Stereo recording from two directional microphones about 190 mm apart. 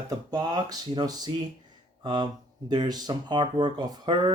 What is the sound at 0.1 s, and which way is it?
Speech, 20° right (ahead or behind).